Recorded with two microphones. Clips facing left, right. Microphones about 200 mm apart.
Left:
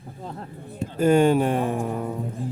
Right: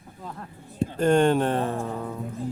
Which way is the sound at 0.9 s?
5° left (ahead or behind).